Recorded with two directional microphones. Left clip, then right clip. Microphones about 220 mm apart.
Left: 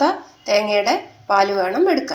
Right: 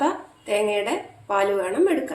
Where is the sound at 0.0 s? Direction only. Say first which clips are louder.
Left 5 dB; 20° left (ahead or behind).